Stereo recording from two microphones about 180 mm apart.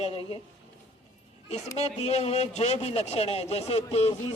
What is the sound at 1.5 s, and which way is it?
Speech, 35° left (ahead or behind).